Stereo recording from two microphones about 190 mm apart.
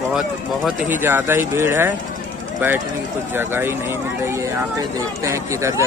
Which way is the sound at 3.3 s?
10° right (ahead or behind).